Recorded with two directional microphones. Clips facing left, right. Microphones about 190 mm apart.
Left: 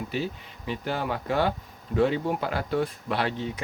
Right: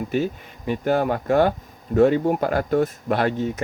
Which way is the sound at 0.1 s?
50° right (ahead or behind).